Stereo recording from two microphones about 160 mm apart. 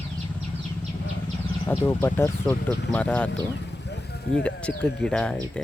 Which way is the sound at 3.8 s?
90° left.